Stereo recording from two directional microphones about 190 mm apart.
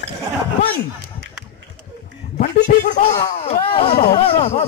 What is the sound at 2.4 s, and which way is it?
A man's voice, 45° left (ahead or behind).